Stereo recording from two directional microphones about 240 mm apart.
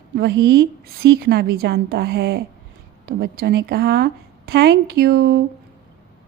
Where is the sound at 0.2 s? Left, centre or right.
Right.